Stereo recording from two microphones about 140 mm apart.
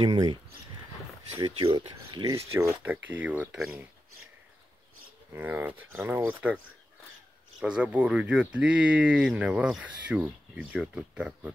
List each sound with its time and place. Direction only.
0.0 s speech: 30° right (ahead or behind)
2.3 s speech: 20° right (ahead or behind)
2.8 s speech: 10° right (ahead or behind)
5.3 s speech: 15° right (ahead or behind)
7.6 s speech: 10° right (ahead or behind)